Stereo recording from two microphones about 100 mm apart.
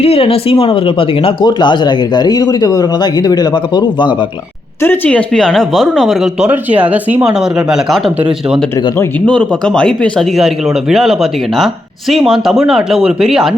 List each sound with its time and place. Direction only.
0.0 s speech: 75° left (ahead or behind)
1.5 s speech: 50° left (ahead or behind)
5.0 s speech: 10° left (ahead or behind)
6.5 s speech: 15° right (ahead or behind)
9.2 s speech: 10° left (ahead or behind)